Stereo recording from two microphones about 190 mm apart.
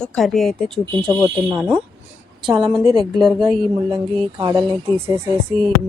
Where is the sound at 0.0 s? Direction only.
Centre (ahead or behind).